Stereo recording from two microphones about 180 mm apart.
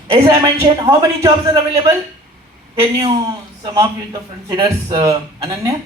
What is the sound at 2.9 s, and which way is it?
A man's voice, 20° right (ahead or behind).